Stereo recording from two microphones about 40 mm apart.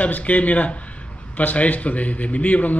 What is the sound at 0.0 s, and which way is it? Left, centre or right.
A man's voice, left.